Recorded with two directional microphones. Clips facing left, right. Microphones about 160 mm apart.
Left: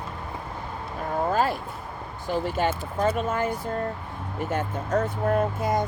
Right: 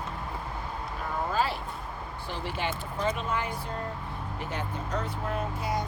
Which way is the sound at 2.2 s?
45° left (ahead or behind).